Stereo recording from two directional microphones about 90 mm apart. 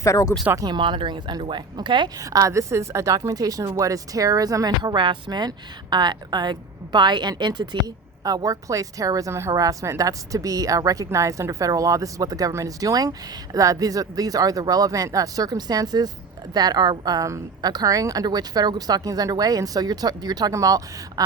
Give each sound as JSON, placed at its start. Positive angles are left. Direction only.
{"t": 0.0, "sound": "speech", "side_deg": 35}
{"t": 0.6, "sound": "speech", "side_deg": -60}
{"t": 2.1, "sound": "speech", "side_deg": -40}